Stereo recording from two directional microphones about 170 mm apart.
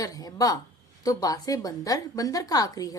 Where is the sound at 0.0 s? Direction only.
20° left (ahead or behind).